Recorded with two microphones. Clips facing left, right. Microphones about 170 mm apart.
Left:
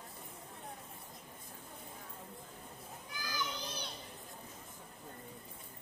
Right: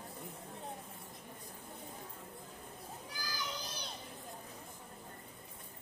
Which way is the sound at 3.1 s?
35° right (ahead or behind).